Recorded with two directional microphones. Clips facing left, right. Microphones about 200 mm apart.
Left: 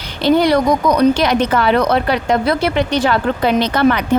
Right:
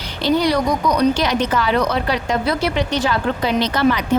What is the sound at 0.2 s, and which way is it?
A woman's voice, 55° left (ahead or behind).